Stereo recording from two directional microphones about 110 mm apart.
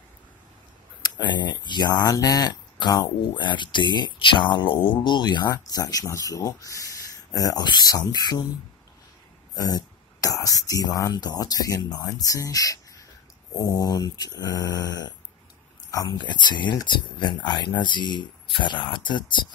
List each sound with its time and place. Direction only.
1.0 s speech: 40° left (ahead or behind)
9.6 s speech: 35° left (ahead or behind)